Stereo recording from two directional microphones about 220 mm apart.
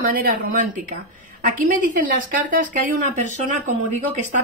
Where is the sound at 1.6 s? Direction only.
40° right (ahead or behind).